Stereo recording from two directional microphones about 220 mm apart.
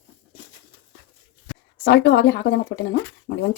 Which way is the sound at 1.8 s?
50° left (ahead or behind).